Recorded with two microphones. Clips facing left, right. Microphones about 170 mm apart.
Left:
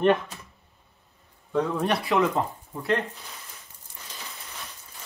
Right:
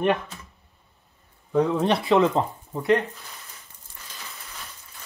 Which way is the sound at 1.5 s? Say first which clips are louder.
Right 4 dB; 10° right (ahead or behind).